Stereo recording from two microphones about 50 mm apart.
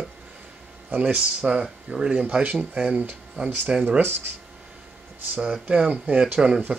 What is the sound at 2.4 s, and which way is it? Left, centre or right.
Speech, right.